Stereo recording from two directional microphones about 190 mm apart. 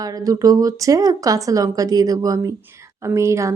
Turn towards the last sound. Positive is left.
turn(degrees=-15)  # may be behind; listen again after turning